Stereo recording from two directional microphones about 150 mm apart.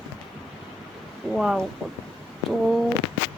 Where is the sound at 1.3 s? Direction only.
Centre (ahead or behind).